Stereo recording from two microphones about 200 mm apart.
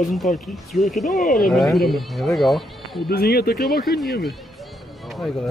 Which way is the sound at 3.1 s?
50° left (ahead or behind).